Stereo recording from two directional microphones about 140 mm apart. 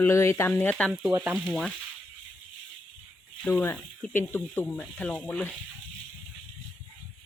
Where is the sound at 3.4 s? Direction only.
15° left (ahead or behind).